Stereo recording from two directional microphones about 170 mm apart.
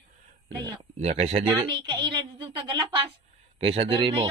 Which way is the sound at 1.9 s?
30° right (ahead or behind).